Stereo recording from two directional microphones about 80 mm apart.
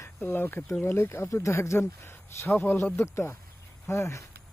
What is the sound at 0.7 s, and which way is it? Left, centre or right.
Speech, left.